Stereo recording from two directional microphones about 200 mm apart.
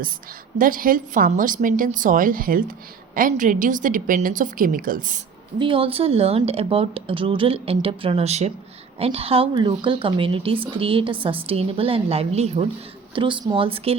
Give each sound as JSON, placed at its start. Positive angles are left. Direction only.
{"t": 0.6, "sound": "a woman's voice", "side_deg": -45}
{"t": 5.5, "sound": "speech", "side_deg": -25}